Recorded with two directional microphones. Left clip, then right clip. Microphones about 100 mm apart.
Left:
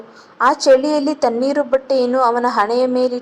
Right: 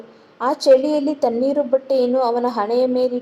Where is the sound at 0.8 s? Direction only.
40° right (ahead or behind).